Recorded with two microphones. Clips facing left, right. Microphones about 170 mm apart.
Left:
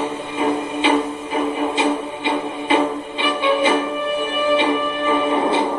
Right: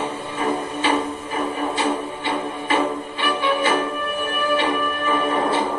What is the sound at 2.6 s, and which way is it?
Music, 20° left (ahead or behind).